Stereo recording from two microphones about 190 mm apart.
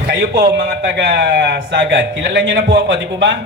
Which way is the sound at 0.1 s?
65° right (ahead or behind).